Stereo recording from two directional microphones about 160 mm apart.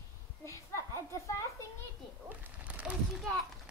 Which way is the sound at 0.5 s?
20° left (ahead or behind).